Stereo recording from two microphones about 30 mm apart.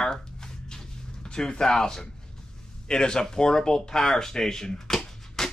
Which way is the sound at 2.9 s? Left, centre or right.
Left.